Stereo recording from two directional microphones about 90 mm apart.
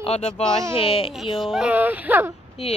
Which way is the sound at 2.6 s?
90° left.